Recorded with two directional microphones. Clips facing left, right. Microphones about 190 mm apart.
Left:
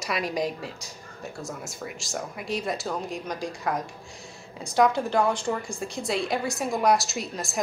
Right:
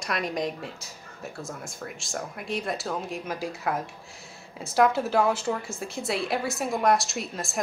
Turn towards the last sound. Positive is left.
turn(degrees=0)  # may be behind; listen again after turning